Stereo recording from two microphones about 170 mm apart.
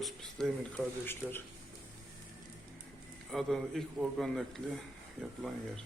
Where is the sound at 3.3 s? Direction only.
Centre (ahead or behind).